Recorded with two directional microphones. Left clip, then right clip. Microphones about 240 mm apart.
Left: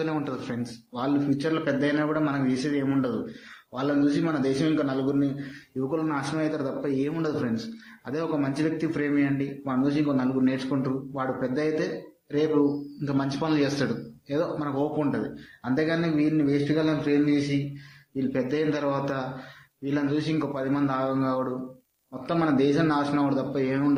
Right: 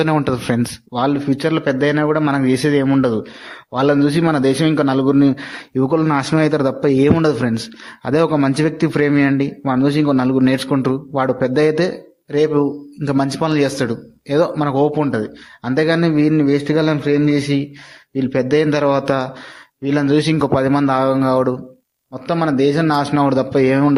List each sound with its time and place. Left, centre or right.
0.0 s a man's voice: right